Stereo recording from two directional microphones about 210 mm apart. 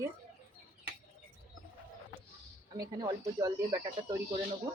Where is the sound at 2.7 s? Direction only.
20° right (ahead or behind).